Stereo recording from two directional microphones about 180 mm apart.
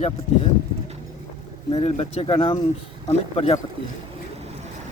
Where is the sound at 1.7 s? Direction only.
35° left (ahead or behind).